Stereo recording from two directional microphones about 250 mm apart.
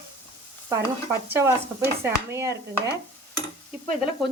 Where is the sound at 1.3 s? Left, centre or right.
Centre.